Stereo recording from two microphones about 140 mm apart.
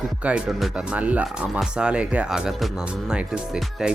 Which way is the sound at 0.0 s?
10° right (ahead or behind).